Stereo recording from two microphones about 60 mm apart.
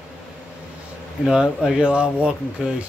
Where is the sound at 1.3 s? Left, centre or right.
Centre.